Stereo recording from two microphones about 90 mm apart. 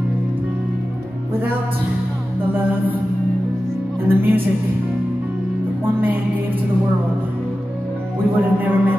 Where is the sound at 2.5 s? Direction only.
20° right (ahead or behind).